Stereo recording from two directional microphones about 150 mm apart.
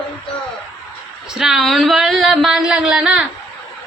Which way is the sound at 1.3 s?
5° right (ahead or behind).